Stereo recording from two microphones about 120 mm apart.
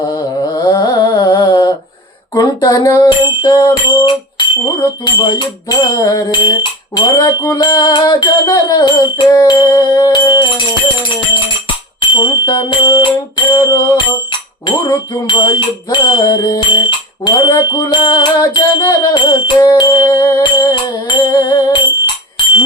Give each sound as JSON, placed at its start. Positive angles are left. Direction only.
{"t": 0.3, "sound": "mantra", "side_deg": 30}
{"t": 2.3, "sound": "jingle bell", "side_deg": 30}
{"t": 4.8, "sound": "jingle bell", "side_deg": 35}
{"t": 11.9, "sound": "speech", "side_deg": 35}
{"t": 12.9, "sound": "jingle bell", "side_deg": 40}
{"t": 13.5, "sound": "music", "side_deg": 25}
{"t": 14.8, "sound": "jingle bell", "side_deg": 40}